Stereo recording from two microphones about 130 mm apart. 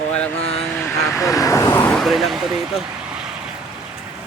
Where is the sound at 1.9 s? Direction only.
Centre (ahead or behind).